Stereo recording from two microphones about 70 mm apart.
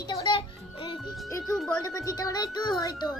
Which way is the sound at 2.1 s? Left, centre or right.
Left.